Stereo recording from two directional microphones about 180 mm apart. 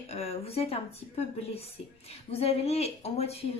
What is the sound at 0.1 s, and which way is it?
A woman's voice, 35° left (ahead or behind).